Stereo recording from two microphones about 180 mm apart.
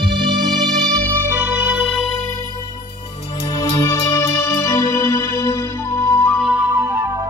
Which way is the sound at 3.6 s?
20° left (ahead or behind).